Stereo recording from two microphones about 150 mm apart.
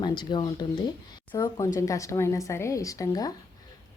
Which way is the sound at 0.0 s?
30° left (ahead or behind).